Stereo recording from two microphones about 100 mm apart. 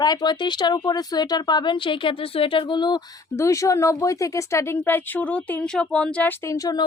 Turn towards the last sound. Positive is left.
turn(degrees=35)  # may be behind; listen again after turning